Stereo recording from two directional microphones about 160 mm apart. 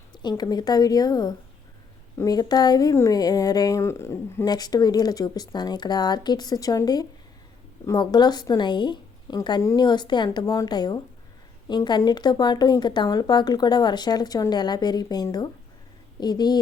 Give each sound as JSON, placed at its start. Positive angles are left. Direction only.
{"t": 0.1, "sound": "speech", "side_deg": 25}